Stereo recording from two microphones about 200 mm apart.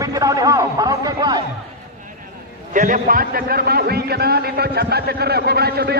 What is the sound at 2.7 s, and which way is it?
A man's voice, 40° right (ahead or behind).